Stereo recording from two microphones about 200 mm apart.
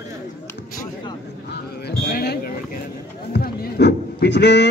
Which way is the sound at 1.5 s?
55° left (ahead or behind).